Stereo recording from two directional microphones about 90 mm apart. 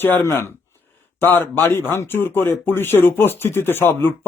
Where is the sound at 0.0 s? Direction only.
25° left (ahead or behind).